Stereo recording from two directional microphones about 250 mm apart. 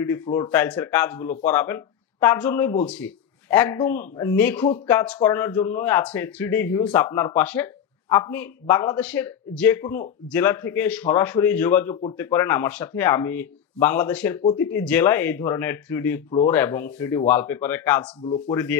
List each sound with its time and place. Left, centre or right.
0.0 s speech: centre
18.2 s speech: centre